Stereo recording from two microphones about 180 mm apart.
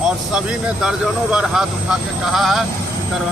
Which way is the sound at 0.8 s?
5° right (ahead or behind).